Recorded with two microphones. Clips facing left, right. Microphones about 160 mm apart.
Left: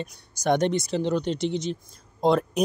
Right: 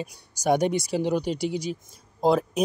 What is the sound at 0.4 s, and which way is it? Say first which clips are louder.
Speech: even; 10° right (ahead or behind).